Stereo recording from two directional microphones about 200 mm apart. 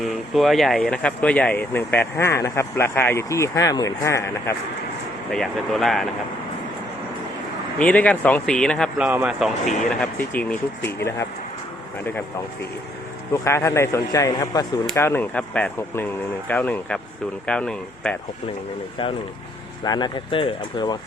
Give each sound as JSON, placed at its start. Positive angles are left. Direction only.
{"t": 0.0, "sound": "speech", "side_deg": 0}
{"t": 5.3, "sound": "speech", "side_deg": 0}
{"t": 7.8, "sound": "speech", "side_deg": 5}
{"t": 13.3, "sound": "speech", "side_deg": 15}
{"t": 19.8, "sound": "speech", "side_deg": 20}